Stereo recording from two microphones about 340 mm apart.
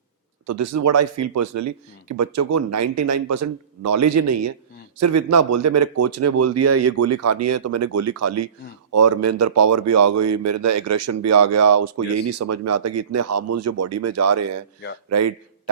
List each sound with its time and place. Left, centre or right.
0.4 s a man's voice: right